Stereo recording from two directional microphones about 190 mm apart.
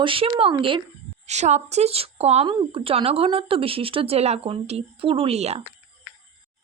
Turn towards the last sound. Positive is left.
turn(degrees=-35)  # may be behind; listen again after turning